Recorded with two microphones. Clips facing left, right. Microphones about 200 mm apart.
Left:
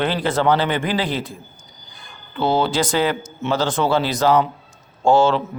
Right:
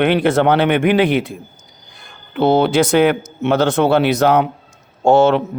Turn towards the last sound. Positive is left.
turn(degrees=-65)  # may be behind; listen again after turning